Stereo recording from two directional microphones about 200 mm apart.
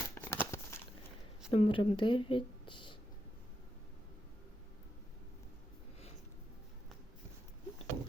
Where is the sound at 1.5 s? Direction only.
25° left (ahead or behind).